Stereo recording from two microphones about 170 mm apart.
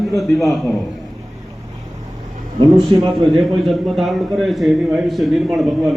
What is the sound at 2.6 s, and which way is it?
Speech, 25° right (ahead or behind).